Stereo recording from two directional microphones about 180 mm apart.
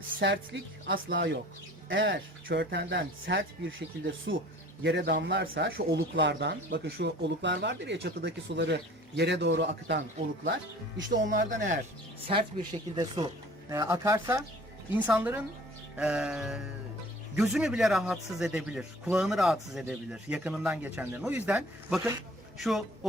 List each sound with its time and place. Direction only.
0.2 s a woman's voice: 90° right
1.1 s speech: 75° right (ahead or behind)
1.9 s speech: 90° right
4.3 s speech: 75° right (ahead or behind)
11.3 s speech: 45° right (ahead or behind)
12.3 s a man's voice: 30° right (ahead or behind); by 22.8 s centre (ahead or behind)